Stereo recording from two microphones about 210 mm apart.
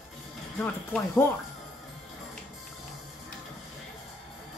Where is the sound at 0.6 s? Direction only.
5° left (ahead or behind).